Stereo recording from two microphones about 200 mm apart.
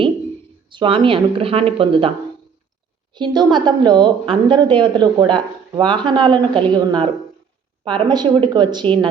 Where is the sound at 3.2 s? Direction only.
20° right (ahead or behind).